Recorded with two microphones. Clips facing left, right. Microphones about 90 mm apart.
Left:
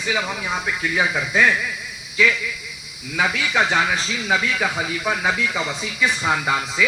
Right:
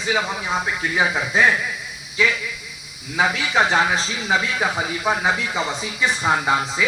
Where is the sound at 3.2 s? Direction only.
30° right (ahead or behind).